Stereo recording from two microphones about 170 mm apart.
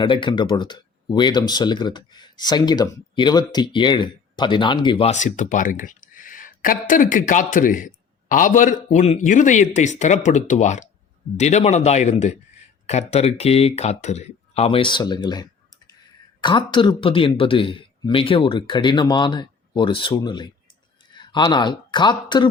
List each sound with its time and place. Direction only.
0.0 s a man's voice: 30° left (ahead or behind)